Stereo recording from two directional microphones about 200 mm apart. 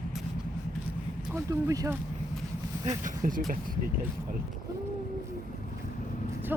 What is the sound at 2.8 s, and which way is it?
Speech, 40° right (ahead or behind).